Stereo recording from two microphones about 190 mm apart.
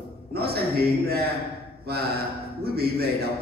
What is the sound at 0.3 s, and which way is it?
Speech, 55° right (ahead or behind).